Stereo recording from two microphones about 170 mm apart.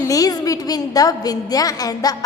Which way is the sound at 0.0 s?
20° left (ahead or behind).